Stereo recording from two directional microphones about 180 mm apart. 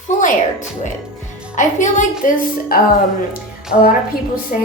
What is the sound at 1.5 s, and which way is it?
A woman's voice, 45° left (ahead or behind).